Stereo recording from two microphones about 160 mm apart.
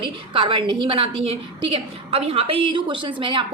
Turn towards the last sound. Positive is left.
turn(degrees=-30)  # may be behind; listen again after turning